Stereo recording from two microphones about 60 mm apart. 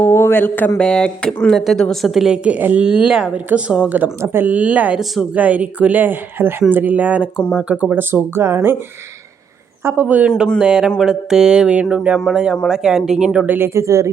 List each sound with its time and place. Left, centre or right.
0.0 s a man's voice: left
0.8 s speech: centre
1.5 s a woman's voice: centre
2.4 s speech: right
2.8 s a sound: centre
3.3 s speech: centre
4.2 s speech: right
4.4 s speech: right
7.3 s a sound: centre
7.9 s speech: right
10.0 s speech: right
10.6 s a sound: centre
13.7 s speech: right